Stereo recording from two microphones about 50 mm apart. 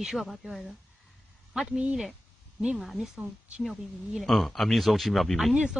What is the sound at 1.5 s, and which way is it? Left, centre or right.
Speech, centre.